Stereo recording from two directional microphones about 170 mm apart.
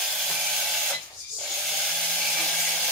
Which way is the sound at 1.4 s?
Centre (ahead or behind).